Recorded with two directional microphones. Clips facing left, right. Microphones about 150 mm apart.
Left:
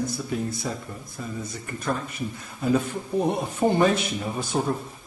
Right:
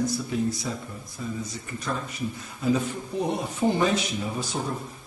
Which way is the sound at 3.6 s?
55° left (ahead or behind).